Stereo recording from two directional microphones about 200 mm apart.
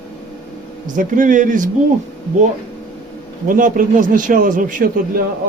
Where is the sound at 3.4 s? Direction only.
40° right (ahead or behind).